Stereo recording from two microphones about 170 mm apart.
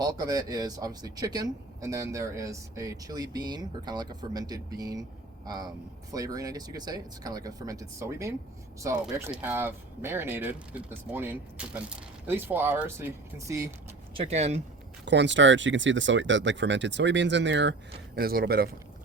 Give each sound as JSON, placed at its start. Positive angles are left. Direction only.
{"t": 0.0, "sound": "speech", "side_deg": -20}
{"t": 14.1, "sound": "speech", "side_deg": -35}
{"t": 15.0, "sound": "speech", "side_deg": -90}